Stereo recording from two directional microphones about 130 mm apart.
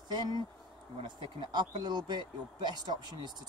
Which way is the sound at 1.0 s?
35° right (ahead or behind).